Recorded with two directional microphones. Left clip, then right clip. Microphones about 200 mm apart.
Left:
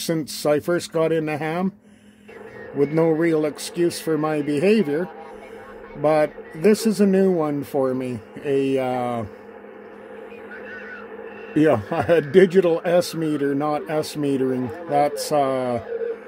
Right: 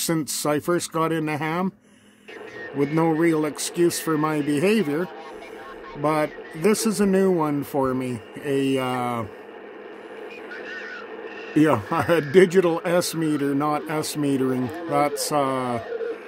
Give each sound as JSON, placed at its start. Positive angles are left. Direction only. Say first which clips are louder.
{"t": 0.0, "sound": "a man's voice", "louder": "left 2 dB", "side_deg": -20}
{"t": 2.8, "sound": "a man's voice", "louder": "left 2 dB", "side_deg": -15}
{"t": 6.0, "sound": "a man's voice", "louder": "left 4 dB", "side_deg": -15}
{"t": 11.5, "sound": "a man's voice", "louder": "left 1 dB", "side_deg": -15}